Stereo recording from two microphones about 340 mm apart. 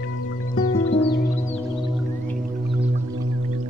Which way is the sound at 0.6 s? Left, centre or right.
Left.